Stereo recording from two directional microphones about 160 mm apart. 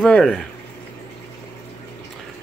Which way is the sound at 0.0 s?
Centre (ahead or behind).